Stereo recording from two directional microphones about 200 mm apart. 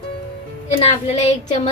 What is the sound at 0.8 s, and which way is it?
Speech, 35° left (ahead or behind).